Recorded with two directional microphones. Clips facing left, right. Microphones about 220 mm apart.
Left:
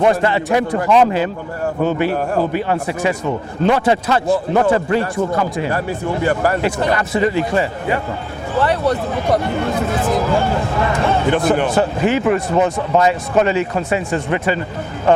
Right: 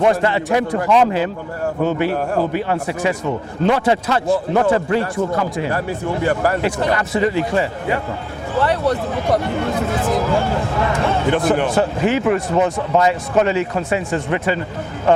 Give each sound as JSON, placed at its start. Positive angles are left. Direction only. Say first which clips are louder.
{"t": 0.0, "sound": "a man's voice", "louder": "left 1 dB", "side_deg": 20}